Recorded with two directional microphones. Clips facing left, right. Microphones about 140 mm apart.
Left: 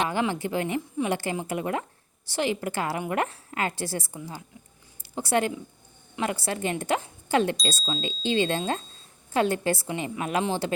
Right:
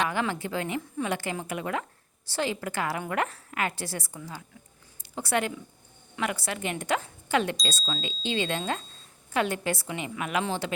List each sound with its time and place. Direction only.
0.0 s a woman's voice: 25° left (ahead or behind)